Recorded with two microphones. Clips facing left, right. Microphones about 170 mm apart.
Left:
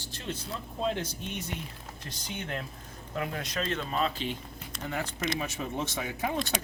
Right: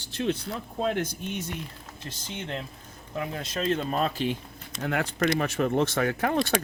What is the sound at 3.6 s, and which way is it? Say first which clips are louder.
Speech: right 5 dB; 35° right (ahead or behind).